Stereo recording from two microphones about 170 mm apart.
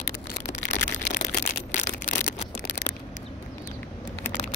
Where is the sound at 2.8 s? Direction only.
65° left (ahead or behind).